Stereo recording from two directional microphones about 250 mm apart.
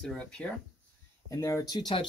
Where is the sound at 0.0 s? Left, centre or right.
Centre.